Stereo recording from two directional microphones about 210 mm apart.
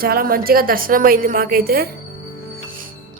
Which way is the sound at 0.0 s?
45° right (ahead or behind).